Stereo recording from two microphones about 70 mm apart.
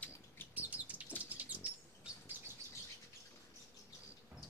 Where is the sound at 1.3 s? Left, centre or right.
Right.